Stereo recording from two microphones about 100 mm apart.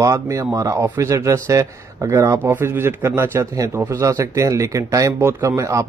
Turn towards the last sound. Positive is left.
turn(degrees=-30)  # may be behind; listen again after turning